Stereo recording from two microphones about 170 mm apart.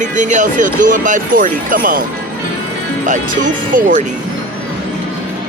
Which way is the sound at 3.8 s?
45° right (ahead or behind).